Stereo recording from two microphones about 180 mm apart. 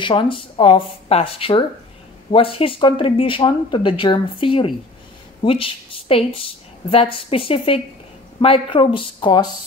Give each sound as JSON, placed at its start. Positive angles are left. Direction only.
{"t": 0.0, "sound": "a woman's voice", "side_deg": 25}